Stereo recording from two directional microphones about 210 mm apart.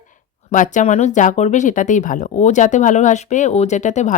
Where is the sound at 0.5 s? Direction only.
35° left (ahead or behind).